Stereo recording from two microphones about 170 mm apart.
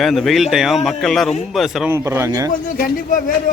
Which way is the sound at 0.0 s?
Centre (ahead or behind).